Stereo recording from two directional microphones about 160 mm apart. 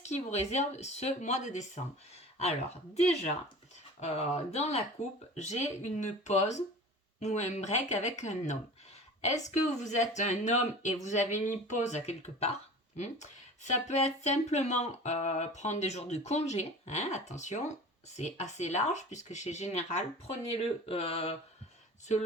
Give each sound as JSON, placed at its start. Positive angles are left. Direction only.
{"t": 0.0, "sound": "speech", "side_deg": 45}
{"t": 13.7, "sound": "speech", "side_deg": 45}